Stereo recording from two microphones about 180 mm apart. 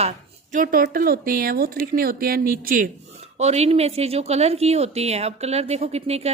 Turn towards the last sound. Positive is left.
turn(degrees=-35)  # may be behind; listen again after turning